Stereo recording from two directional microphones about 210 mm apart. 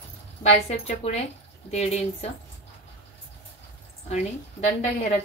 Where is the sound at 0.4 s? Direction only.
30° left (ahead or behind).